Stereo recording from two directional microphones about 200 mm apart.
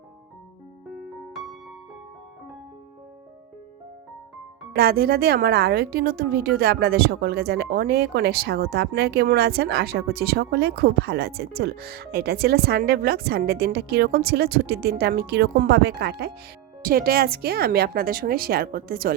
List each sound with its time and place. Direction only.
1.3 s music: centre (ahead or behind)
4.7 s a woman's voice: 50° right (ahead or behind)